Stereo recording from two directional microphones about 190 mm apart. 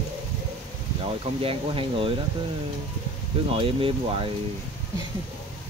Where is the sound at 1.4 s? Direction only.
30° right (ahead or behind).